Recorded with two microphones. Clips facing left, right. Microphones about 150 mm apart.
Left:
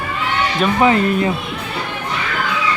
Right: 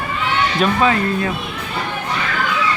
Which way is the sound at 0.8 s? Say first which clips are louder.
Left 3 dB; 20° left (ahead or behind).